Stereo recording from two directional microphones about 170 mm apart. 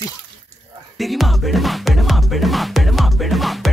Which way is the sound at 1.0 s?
Centre (ahead or behind).